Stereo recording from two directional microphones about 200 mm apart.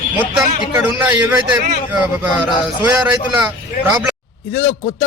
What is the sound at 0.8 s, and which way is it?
A man's voice, 10° right (ahead or behind).